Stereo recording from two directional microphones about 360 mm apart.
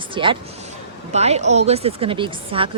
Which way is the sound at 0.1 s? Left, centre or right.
Centre.